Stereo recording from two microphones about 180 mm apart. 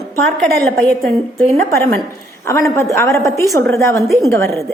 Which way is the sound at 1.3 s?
15° left (ahead or behind).